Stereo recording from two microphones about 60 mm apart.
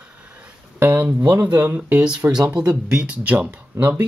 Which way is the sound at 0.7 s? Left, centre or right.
Right.